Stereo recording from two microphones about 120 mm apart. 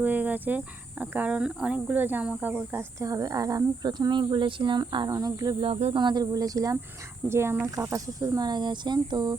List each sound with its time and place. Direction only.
0.0 s speech: 15° right (ahead or behind)
3.0 s speech: 30° right (ahead or behind)
5.5 s cricket: 55° right (ahead or behind)
6.0 s speech: 35° right (ahead or behind)